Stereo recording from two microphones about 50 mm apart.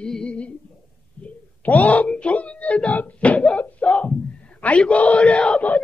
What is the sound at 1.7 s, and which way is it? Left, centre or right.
Speech, left.